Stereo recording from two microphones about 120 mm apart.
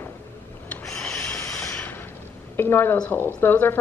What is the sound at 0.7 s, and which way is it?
Rub, 5° left (ahead or behind).